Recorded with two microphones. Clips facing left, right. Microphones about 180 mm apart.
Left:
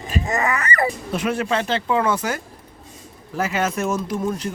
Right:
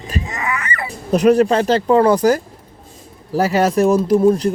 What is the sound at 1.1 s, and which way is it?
Speech, 40° right (ahead or behind).